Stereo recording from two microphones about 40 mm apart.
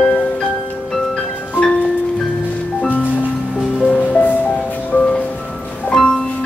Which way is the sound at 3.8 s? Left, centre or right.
Left.